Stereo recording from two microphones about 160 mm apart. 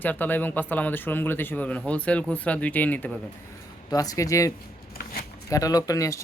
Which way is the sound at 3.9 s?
20° left (ahead or behind).